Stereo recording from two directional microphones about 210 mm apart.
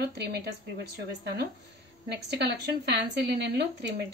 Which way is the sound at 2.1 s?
55° right (ahead or behind).